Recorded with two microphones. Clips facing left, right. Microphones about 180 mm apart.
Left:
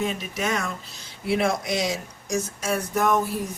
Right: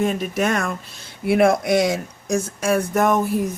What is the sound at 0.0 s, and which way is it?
Speech, 50° right (ahead or behind).